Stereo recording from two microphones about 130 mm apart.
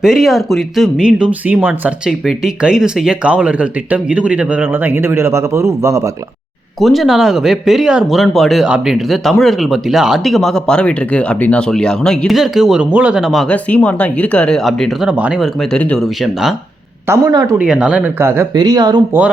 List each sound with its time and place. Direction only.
0.0 s speech: centre (ahead or behind); by 6.0 s 25° right (ahead or behind)
6.7 s speech: centre (ahead or behind)
13.5 s speech: 10° left (ahead or behind)
15.1 s speech: 10° right (ahead or behind)
15.7 s speech: 5° left (ahead or behind)
17.1 s speech: 25° right (ahead or behind)
17.6 s speech: 5° right (ahead or behind)
18.2 s speech: 20° right (ahead or behind)
18.5 s speech: 30° right (ahead or behind)